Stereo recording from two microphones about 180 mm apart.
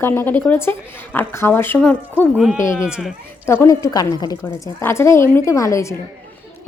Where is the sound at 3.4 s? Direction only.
15° left (ahead or behind).